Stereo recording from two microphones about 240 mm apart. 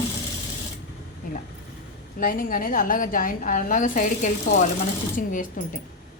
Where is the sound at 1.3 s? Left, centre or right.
Left.